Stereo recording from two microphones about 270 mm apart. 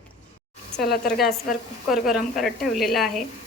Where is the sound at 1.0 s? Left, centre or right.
Centre.